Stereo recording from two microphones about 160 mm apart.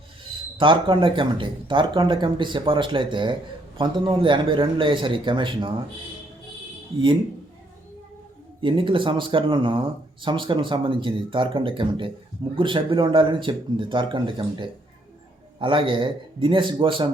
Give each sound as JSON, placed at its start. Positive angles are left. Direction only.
{"t": 0.5, "sound": "speech", "side_deg": -30}
{"t": 8.6, "sound": "speech", "side_deg": -30}